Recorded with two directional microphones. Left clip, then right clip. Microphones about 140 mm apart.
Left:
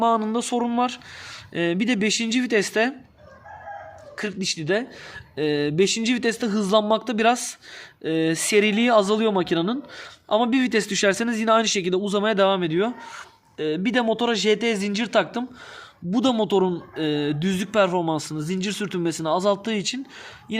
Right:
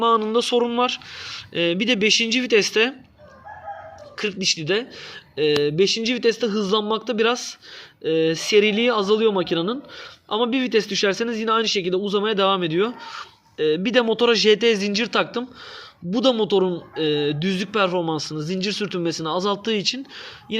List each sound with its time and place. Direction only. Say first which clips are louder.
0.0 s speech: right 3 dB; 35° left (ahead or behind)
4.2 s speech: right 5 dB; 40° left (ahead or behind)
16.0 s speech: right 3 dB; 35° left (ahead or behind)